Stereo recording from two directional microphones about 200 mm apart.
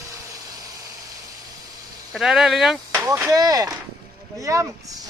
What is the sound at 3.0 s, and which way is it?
Speech, 15° right (ahead or behind).